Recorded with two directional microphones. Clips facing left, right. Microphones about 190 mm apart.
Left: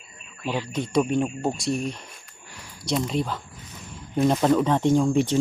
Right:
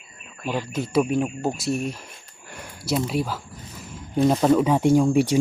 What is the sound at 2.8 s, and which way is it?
Speech, 5° right (ahead or behind).